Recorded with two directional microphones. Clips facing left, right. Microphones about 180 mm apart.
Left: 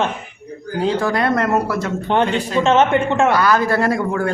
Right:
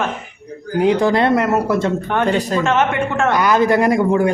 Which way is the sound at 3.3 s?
20° right (ahead or behind).